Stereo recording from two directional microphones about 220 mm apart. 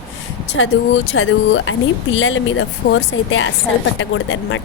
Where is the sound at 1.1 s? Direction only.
60° left (ahead or behind).